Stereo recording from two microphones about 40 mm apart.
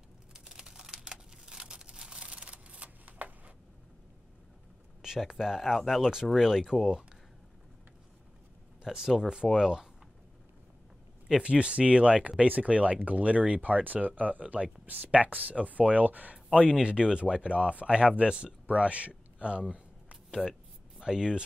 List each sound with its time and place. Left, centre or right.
0.3 s a sound: centre; by 3.5 s right
5.0 s speech: centre
6.7 s speech: centre
8.8 s speech: centre
11.4 s speech: right
16.7 s speech: right
19.7 s a sound: right
21.0 s speech: centre